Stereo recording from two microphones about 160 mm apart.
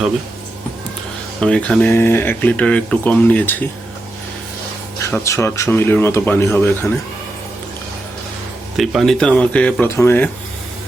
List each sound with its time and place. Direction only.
1.4 s speech: 5° left (ahead or behind)
5.2 s speech: 20° left (ahead or behind)
8.7 s speech: centre (ahead or behind); by 10.2 s 15° left (ahead or behind)